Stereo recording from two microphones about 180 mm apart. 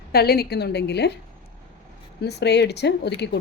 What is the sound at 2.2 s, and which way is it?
Speech, 70° left (ahead or behind).